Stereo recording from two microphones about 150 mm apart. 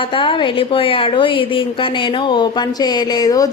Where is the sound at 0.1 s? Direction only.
35° left (ahead or behind).